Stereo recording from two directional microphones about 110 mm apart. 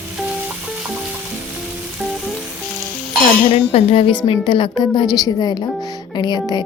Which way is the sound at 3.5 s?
75° left (ahead or behind).